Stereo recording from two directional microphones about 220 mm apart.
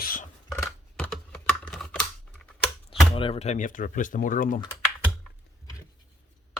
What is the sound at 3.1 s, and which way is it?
Speech, 25° left (ahead or behind).